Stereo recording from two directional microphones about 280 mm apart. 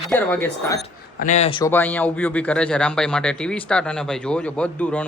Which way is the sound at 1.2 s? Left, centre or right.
Left.